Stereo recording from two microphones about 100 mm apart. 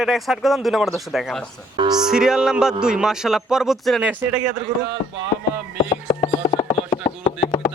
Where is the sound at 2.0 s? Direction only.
5° right (ahead or behind).